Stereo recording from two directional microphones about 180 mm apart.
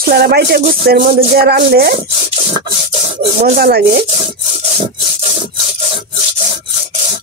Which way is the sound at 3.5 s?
60° right (ahead or behind).